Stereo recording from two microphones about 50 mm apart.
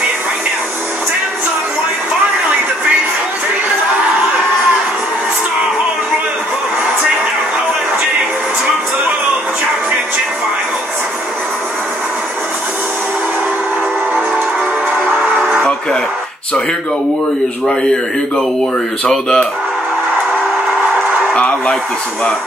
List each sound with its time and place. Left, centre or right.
17.6 s a man's voice: centre
21.3 s speech: centre